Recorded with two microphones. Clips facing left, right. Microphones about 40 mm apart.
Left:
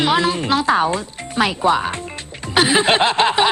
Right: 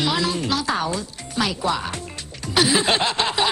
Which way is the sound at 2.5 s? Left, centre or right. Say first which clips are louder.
Left 4 dB; left.